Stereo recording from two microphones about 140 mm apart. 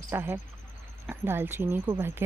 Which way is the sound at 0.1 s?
15° right (ahead or behind).